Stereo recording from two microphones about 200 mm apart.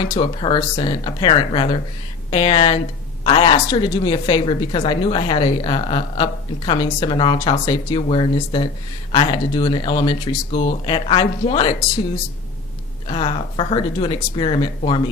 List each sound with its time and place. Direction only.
0.2 s a woman's voice: 25° left (ahead or behind)
13.1 s a woman's voice: 30° left (ahead or behind)